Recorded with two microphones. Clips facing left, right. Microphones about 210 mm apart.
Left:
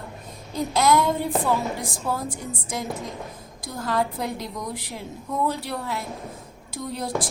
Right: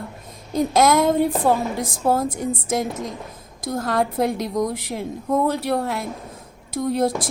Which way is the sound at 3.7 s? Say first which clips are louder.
Right 4 dB; 50° right (ahead or behind).